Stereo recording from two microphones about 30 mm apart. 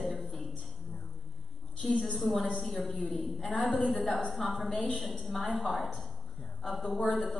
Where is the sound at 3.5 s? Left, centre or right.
Left.